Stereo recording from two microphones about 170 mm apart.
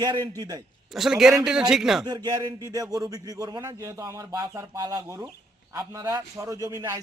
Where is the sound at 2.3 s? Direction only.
20° right (ahead or behind).